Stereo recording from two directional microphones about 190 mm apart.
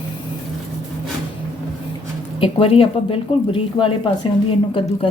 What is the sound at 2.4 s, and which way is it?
A woman's voice, 30° left (ahead or behind).